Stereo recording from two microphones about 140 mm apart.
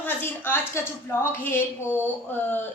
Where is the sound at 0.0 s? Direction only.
15° left (ahead or behind).